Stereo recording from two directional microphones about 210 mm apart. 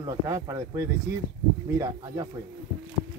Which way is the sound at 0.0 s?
15° right (ahead or behind).